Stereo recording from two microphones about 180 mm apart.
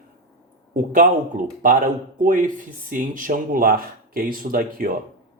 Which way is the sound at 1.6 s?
50° right (ahead or behind).